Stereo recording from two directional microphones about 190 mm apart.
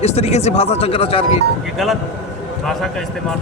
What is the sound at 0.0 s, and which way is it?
Speech, 35° left (ahead or behind).